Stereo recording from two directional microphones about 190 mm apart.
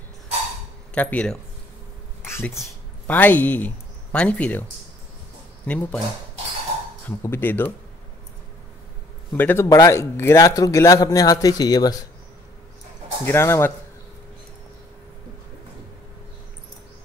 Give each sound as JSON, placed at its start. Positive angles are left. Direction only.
{"t": 0.9, "sound": "speech", "side_deg": 5}
{"t": 5.7, "sound": "speech", "side_deg": 10}
{"t": 7.1, "sound": "speech", "side_deg": 10}
{"t": 9.3, "sound": "speech", "side_deg": 10}
{"t": 13.2, "sound": "speech", "side_deg": 15}